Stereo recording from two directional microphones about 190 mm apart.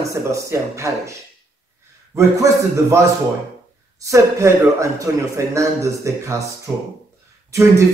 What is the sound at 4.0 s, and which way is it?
A man's voice, 15° right (ahead or behind).